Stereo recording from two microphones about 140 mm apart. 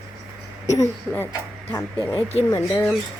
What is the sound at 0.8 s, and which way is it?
Speech, 15° left (ahead or behind).